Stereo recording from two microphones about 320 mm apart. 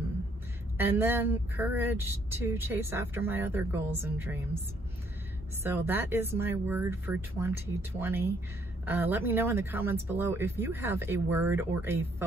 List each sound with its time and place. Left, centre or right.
0.7 s speech: centre
5.6 s speech: centre